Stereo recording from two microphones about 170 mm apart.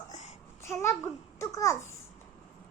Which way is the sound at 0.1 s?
40° left (ahead or behind).